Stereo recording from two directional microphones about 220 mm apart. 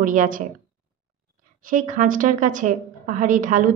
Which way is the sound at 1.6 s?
40° right (ahead or behind).